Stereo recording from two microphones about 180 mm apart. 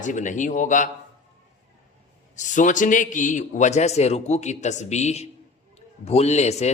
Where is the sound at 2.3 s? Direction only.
45° left (ahead or behind).